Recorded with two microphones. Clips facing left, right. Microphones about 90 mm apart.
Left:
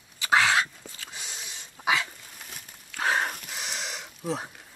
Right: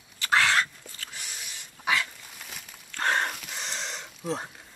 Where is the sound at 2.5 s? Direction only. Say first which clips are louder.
Right 1 dB; 5° left (ahead or behind).